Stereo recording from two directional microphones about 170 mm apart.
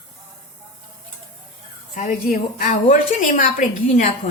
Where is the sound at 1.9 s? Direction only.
50° left (ahead or behind).